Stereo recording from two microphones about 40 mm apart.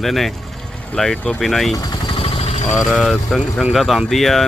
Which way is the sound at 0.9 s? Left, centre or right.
Left.